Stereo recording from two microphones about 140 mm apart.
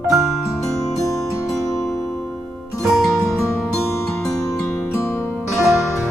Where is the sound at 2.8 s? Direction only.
Centre (ahead or behind).